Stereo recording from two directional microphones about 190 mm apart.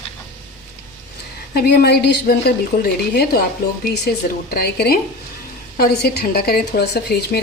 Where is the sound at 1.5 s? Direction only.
55° left (ahead or behind).